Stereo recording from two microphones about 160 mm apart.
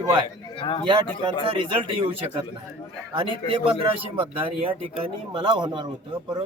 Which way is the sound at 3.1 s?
35° right (ahead or behind).